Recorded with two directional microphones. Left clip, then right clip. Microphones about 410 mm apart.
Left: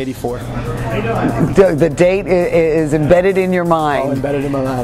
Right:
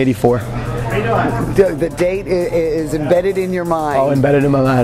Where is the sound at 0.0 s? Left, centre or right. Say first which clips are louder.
Right 7 dB; right.